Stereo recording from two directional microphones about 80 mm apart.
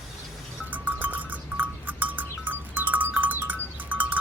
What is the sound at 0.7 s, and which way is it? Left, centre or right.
Sheep, right.